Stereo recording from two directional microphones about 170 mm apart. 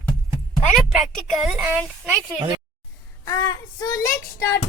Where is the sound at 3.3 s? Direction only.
20° left (ahead or behind).